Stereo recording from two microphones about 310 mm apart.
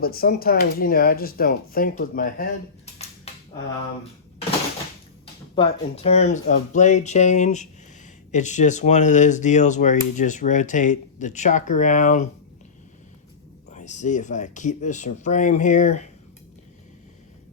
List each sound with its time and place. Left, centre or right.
0.0 s speech: left
5.5 s speech: centre
13.7 s speech: left